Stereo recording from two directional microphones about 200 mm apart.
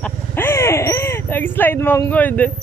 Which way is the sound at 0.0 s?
10° left (ahead or behind).